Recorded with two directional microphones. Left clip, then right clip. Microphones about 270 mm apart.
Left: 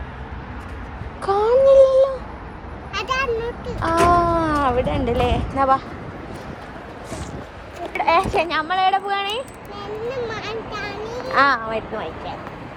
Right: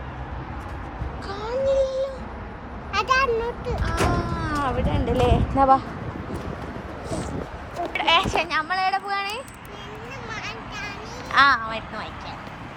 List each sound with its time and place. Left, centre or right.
1.2 s a sound: centre
2.9 s a sound: centre
3.8 s speech: centre
7.9 s speech: centre
10.1 s a child's voice: centre
11.0 s children playing: centre
11.3 s speech: centre